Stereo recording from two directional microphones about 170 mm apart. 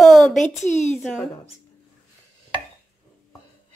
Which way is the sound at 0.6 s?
45° left (ahead or behind).